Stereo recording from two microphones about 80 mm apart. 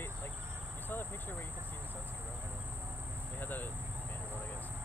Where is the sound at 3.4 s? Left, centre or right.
Left.